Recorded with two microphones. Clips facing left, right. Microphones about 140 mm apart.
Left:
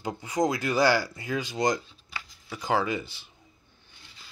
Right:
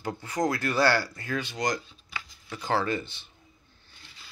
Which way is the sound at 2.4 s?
15° left (ahead or behind).